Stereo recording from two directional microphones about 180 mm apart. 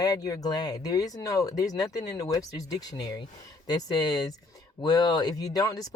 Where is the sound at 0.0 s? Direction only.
20° left (ahead or behind).